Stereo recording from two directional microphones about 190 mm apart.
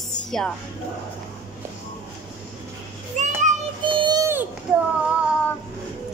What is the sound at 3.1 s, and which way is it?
Children playing, 40° right (ahead or behind).